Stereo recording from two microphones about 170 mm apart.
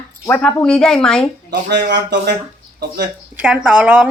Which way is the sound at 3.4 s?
5° right (ahead or behind).